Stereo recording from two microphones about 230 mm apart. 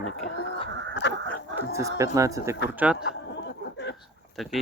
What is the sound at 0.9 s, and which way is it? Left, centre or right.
Honk, left.